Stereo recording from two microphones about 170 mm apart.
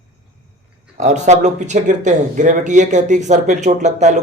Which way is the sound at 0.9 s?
45° right (ahead or behind).